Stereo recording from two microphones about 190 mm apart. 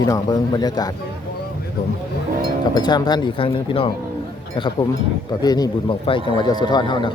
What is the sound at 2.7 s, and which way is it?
Speech, 20° left (ahead or behind).